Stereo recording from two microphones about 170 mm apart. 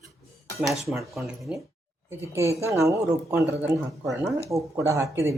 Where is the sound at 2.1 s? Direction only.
15° right (ahead or behind).